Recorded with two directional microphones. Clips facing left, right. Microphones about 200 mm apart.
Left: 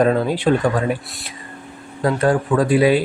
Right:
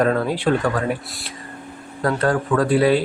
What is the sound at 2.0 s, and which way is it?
Speech, 15° left (ahead or behind).